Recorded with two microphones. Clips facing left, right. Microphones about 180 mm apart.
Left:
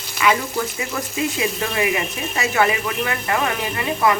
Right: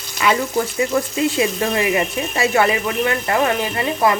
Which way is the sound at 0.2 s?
35° right (ahead or behind).